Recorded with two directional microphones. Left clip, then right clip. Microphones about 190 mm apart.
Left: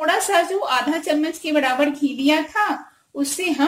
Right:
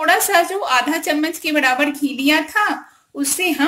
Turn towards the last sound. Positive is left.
turn(degrees=25)  # may be behind; listen again after turning